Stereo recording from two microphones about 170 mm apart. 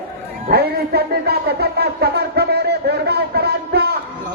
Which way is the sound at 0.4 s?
65° right (ahead or behind).